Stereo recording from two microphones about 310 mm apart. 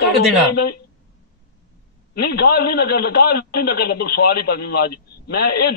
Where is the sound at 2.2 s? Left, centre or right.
Left.